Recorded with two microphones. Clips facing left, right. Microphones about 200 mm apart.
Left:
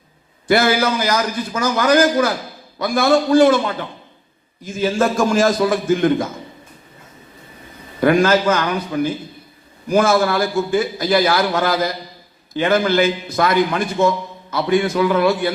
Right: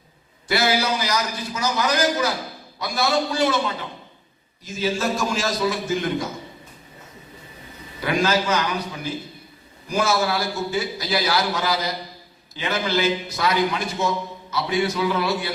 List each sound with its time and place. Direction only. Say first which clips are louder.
0.4 s a man's voice: left 6 dB; 50° left (ahead or behind)
8.0 s a man's voice: left 8 dB; 50° left (ahead or behind)